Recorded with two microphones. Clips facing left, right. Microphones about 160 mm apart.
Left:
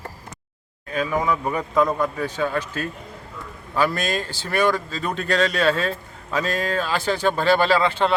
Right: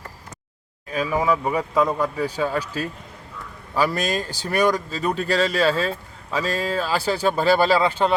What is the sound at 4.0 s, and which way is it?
Speech, 40° right (ahead or behind).